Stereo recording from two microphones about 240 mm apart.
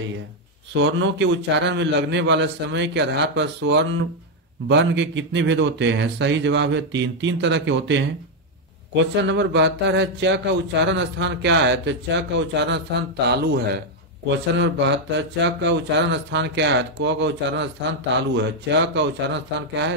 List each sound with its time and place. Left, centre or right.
0.7 s speech: right
14.6 s speech: right